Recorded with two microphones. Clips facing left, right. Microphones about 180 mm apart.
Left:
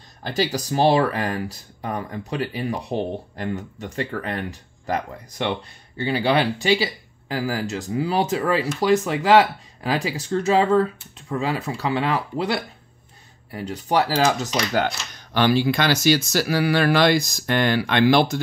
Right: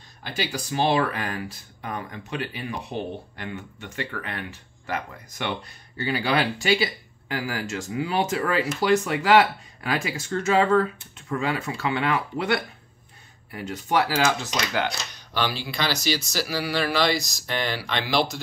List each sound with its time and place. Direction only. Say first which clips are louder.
0.3 s speech: left 6 dB; 40° left (ahead or behind)